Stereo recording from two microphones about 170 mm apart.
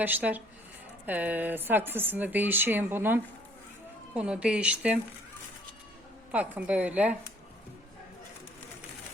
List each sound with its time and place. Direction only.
0.0 s speech: 10° right (ahead or behind)
6.3 s speech: 10° right (ahead or behind)